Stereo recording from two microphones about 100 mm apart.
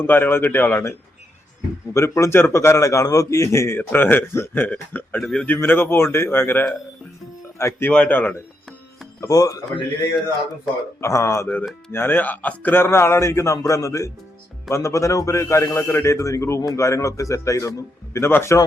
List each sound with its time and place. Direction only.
0.0 s a man's voice: 20° left (ahead or behind)
5.2 s speech: 5° left (ahead or behind)
5.5 s a man's voice: 20° left (ahead or behind)
9.2 s a man's voice: 35° left (ahead or behind)
11.0 s a man's voice: 30° left (ahead or behind)